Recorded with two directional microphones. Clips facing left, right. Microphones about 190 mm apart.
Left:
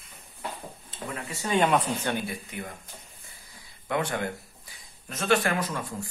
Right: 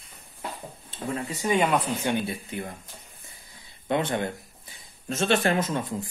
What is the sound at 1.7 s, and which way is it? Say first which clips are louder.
Speech: even; centre (ahead or behind).